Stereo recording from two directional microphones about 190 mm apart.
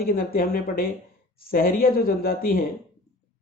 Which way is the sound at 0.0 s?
50° left (ahead or behind).